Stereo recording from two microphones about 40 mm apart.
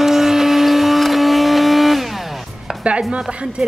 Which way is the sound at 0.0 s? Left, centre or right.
Centre.